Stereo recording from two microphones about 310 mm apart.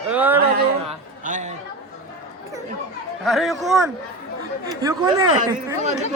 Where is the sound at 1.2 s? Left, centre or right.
Right.